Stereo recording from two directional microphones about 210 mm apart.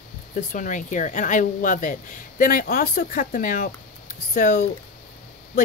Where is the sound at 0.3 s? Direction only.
40° left (ahead or behind).